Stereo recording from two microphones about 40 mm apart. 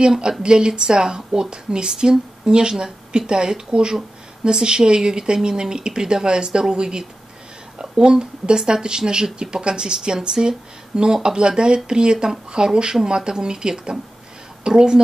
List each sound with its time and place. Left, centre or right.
0.4 s a woman's voice: right